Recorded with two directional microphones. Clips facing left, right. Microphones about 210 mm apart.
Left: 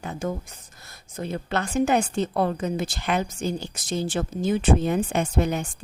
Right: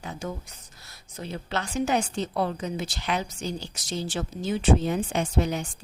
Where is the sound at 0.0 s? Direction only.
50° left (ahead or behind).